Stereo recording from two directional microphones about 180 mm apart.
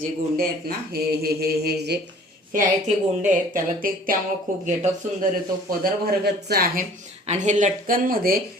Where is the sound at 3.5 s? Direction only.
50° right (ahead or behind).